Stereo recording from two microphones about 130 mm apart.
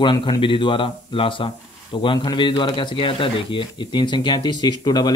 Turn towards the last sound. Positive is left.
turn(degrees=35)  # may be behind; listen again after turning